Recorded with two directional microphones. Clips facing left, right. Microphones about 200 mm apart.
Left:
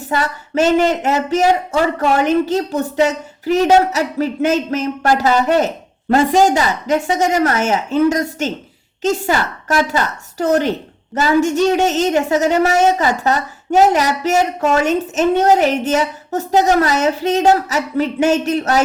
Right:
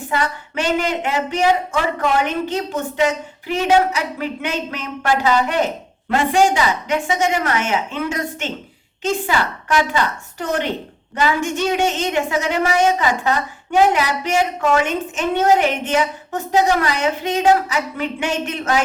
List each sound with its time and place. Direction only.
0.0 s a woman's voice: 40° left (ahead or behind)